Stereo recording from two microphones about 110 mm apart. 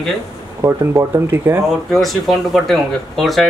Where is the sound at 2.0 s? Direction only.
Centre (ahead or behind).